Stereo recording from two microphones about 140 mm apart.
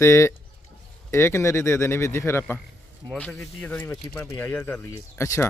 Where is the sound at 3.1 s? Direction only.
5° left (ahead or behind); by 5.4 s 20° left (ahead or behind).